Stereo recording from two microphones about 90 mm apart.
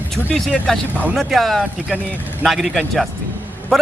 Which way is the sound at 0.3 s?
10° left (ahead or behind).